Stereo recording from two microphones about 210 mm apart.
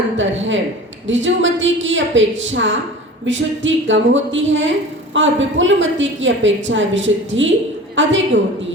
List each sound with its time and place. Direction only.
0.2 s a woman's voice: 65° right (ahead or behind)